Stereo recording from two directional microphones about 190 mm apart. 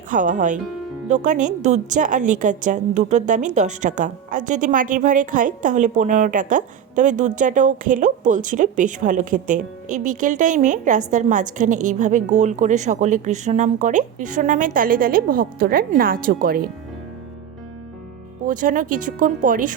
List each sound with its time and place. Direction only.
0.1 s a woman's voice: 45° right (ahead or behind)
18.4 s speech: 45° right (ahead or behind)